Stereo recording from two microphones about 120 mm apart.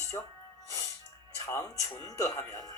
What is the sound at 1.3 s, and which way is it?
A man's voice, 25° left (ahead or behind).